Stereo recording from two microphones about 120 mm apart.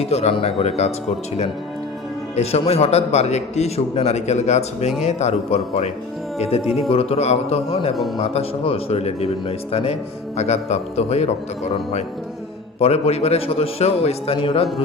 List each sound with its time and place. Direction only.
0.0 s speech: 60° left (ahead or behind)
2.3 s speech: 60° left (ahead or behind)
7.9 s speech: centre (ahead or behind)
8.2 s speech: 60° left (ahead or behind)